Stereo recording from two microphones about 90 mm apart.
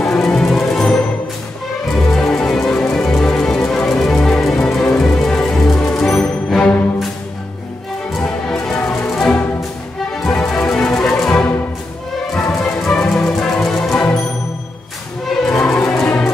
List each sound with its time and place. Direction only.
0.0 s music: 5° left (ahead or behind)
2.1 s music: 5° left (ahead or behind)
8.2 s music: 5° left (ahead or behind)
10.5 s music: 10° left (ahead or behind)
12.4 s music: 15° left (ahead or behind)
15.5 s music: 15° left (ahead or behind)